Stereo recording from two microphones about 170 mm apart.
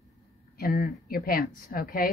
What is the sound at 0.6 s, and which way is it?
Speech, 60° left (ahead or behind).